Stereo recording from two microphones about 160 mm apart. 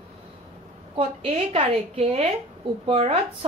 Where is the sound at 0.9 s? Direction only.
40° right (ahead or behind).